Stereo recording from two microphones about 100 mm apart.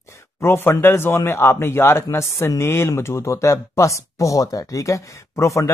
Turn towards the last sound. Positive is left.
turn(degrees=30)  # may be behind; listen again after turning